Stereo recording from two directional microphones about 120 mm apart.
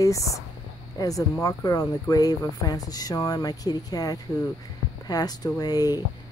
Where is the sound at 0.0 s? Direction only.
25° left (ahead or behind).